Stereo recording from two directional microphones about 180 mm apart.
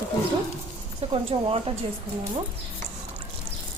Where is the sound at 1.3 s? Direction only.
35° right (ahead or behind).